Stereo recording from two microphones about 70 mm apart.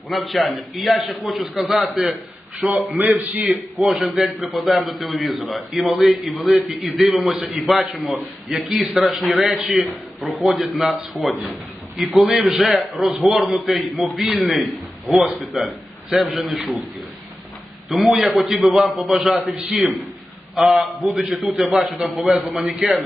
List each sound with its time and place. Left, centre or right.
0.1 s a man's voice: centre
2.6 s a man's voice: centre
9.6 s a man's voice: centre
10.2 s a man's voice: centre
15.1 s a man's voice: right
15.4 s a man's voice: centre
17.8 s a man's voice: centre